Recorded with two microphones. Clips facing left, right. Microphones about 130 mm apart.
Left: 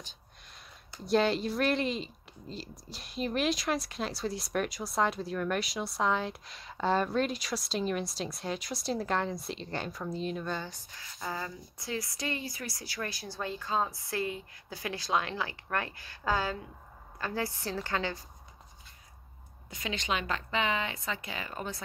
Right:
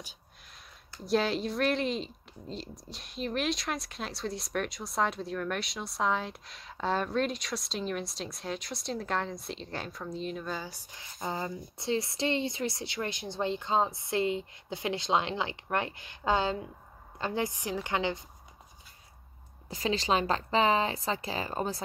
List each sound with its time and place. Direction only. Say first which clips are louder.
1.0 s speech: left 1 dB; centre (ahead or behind)
10.9 s a woman's voice: right 6 dB; 20° right (ahead or behind)
19.7 s a woman's voice: right 6 dB; 30° right (ahead or behind)